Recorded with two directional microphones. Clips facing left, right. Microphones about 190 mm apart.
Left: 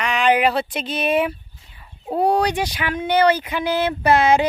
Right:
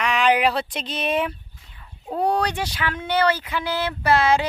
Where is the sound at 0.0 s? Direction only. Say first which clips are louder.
Left 2 dB; centre (ahead or behind).